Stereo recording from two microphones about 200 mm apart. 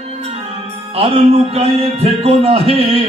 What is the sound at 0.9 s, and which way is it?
Music, 30° right (ahead or behind).